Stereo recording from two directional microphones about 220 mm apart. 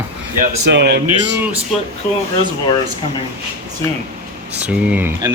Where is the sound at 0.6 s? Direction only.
50° right (ahead or behind).